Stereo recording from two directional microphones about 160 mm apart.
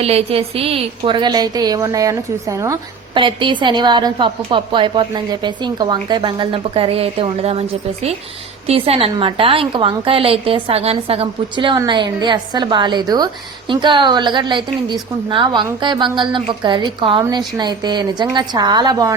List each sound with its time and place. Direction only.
0.0 s a woman's voice: 40° right (ahead or behind); by 2.7 s 20° right (ahead or behind)
3.2 s a woman's voice: 30° right (ahead or behind)